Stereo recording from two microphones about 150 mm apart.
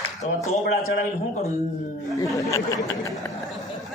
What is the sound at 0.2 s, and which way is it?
Speech, 50° left (ahead or behind).